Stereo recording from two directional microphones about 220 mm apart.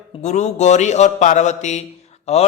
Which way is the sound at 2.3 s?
30° left (ahead or behind).